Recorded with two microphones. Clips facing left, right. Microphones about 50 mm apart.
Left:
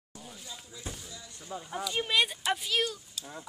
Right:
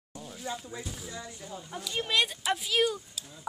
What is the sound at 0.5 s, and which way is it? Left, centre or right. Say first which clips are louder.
Speech: right 10 dB; right.